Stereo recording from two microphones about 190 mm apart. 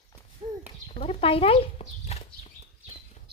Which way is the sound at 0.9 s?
30° left (ahead or behind).